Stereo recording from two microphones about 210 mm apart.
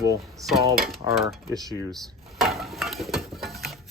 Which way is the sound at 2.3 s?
Centre (ahead or behind).